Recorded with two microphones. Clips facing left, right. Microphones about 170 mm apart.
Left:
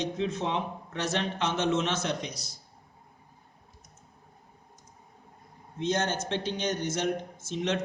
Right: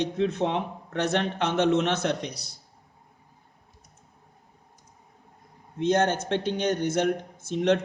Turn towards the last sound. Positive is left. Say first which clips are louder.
# right 7 dB
turn(degrees=-60)  # may be behind; listen again after turning